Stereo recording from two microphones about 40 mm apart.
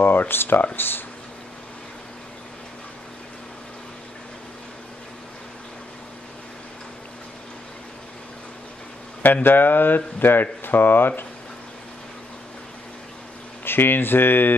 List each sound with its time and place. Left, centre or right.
0.0 s speech: left
9.2 s speech: left
13.7 s speech: left